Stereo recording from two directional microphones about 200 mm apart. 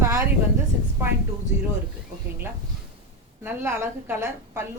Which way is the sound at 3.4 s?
10° right (ahead or behind).